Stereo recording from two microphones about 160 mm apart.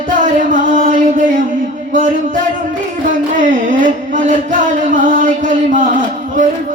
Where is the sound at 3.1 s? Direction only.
55° right (ahead or behind).